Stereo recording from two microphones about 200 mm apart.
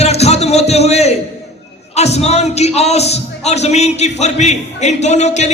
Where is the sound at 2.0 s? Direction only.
35° left (ahead or behind).